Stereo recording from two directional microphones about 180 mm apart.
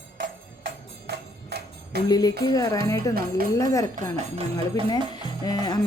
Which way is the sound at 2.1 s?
20° left (ahead or behind).